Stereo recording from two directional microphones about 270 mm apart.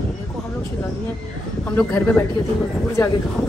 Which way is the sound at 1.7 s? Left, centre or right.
Centre.